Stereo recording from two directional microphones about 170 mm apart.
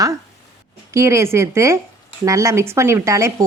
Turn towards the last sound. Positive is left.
turn(degrees=-15)  # may be behind; listen again after turning